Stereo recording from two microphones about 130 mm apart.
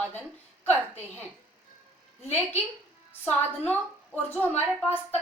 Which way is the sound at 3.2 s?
15° left (ahead or behind).